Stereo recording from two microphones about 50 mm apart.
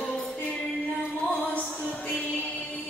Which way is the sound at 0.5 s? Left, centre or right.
Left.